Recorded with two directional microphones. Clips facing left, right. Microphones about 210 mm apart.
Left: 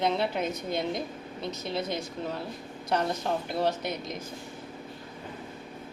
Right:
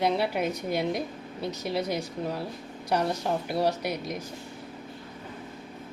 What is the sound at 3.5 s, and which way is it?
Speech, 10° right (ahead or behind).